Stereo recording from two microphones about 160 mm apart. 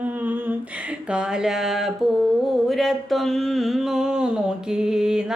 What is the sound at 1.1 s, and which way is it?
Music, 5° right (ahead or behind).